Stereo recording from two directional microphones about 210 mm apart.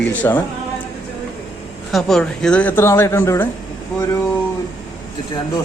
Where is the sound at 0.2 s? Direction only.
10° left (ahead or behind).